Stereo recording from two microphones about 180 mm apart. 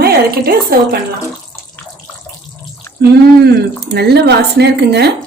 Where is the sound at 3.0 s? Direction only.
65° right (ahead or behind).